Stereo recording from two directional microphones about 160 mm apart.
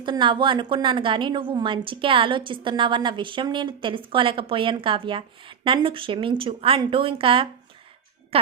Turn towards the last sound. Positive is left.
turn(degrees=-35)  # may be behind; listen again after turning